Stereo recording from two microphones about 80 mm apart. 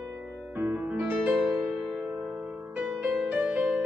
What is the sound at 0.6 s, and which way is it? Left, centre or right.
Music, right.